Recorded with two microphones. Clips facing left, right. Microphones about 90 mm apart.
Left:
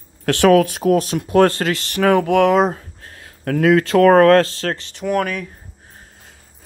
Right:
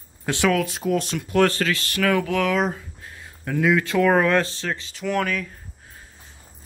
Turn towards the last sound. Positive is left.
turn(degrees=40)  # may be behind; listen again after turning